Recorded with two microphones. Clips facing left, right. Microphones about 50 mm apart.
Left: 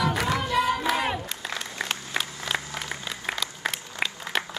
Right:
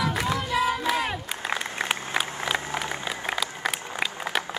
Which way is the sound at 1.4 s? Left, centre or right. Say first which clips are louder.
Right 7 dB; right.